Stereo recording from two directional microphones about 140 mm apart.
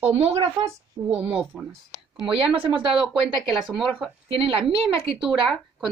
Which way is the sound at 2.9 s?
Centre (ahead or behind).